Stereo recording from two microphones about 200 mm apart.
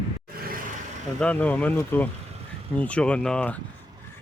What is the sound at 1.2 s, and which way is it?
Speech, 5° left (ahead or behind).